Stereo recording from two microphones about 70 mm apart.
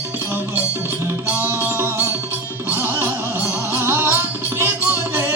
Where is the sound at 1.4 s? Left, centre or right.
Right.